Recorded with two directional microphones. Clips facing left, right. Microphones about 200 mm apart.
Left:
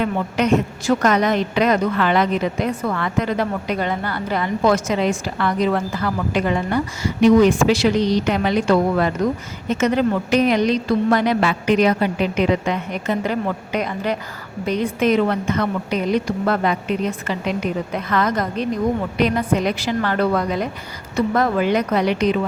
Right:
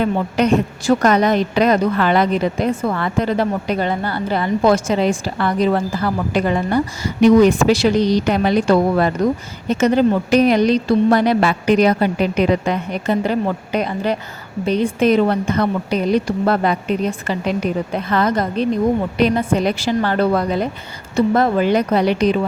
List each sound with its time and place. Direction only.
0.0 s a woman's voice: 35° right (ahead or behind)